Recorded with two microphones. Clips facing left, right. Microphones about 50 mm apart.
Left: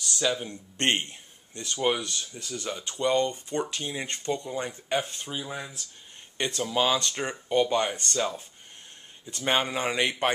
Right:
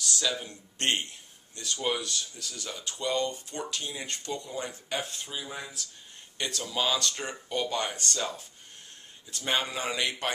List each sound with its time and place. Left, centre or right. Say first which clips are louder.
0.0 s a sound: left 3 dB; centre
0.5 s speech: left 3 dB; left; by 5.7 s centre
6.3 s speech: left 5 dB; left